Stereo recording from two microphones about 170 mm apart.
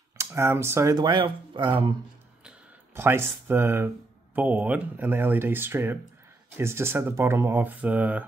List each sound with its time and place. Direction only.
0.2 s speech: 15° right (ahead or behind)
2.4 s a sound: 15° right (ahead or behind)
4.4 s speech: 10° right (ahead or behind)